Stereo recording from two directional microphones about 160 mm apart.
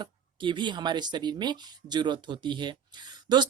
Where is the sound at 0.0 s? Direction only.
30° right (ahead or behind).